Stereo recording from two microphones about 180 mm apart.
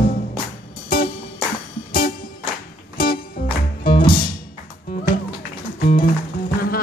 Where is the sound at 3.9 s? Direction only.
25° left (ahead or behind).